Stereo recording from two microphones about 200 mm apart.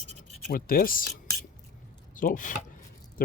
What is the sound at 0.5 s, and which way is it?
Speech, 45° left (ahead or behind).